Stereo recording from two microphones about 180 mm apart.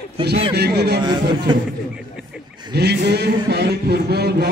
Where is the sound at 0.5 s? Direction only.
65° right (ahead or behind).